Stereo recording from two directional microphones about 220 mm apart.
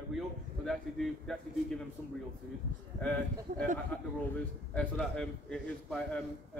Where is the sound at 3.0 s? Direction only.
5° left (ahead or behind).